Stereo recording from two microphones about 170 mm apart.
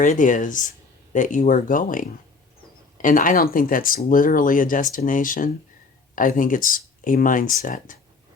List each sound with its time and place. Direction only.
0.0 s speech: 50° left (ahead or behind)